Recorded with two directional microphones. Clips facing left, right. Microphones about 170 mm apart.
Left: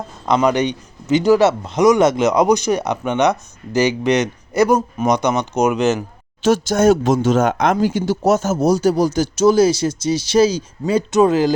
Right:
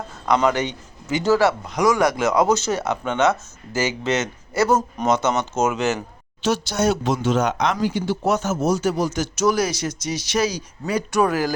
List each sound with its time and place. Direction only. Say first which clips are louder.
0.3 s speech: left 4 dB; 20° left (ahead or behind)
6.4 s speech: left 7 dB; 45° left (ahead or behind); by 11.5 s 20° left (ahead or behind)